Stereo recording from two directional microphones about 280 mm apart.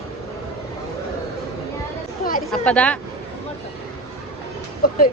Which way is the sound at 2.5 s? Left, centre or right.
Centre.